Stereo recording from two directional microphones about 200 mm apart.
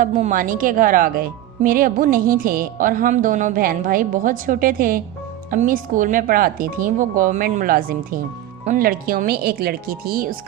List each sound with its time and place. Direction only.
0.0 s speech: 40° right (ahead or behind)